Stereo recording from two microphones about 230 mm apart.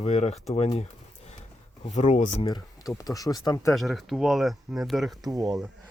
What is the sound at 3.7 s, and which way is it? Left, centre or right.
Speech, centre.